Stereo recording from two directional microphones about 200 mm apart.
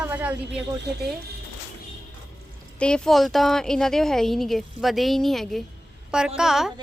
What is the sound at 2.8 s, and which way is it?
A woman's voice, 5° left (ahead or behind).